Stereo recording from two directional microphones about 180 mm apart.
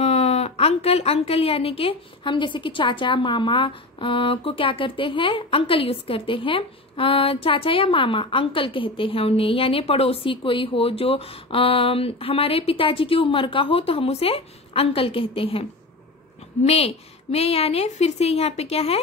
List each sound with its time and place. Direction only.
0.0 s a woman's voice: 35° left (ahead or behind)
16.6 s a woman's voice: 35° left (ahead or behind)